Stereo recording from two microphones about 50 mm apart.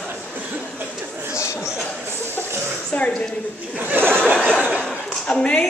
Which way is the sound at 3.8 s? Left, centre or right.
Right.